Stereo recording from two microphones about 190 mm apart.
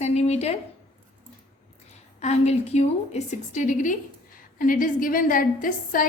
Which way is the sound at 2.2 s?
35° left (ahead or behind).